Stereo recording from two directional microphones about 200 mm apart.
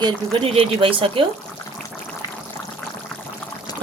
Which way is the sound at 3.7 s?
20° left (ahead or behind).